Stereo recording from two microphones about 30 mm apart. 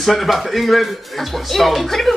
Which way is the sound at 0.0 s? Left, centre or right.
Centre.